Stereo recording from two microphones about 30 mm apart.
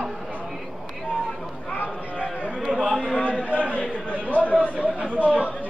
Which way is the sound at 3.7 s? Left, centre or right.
Left.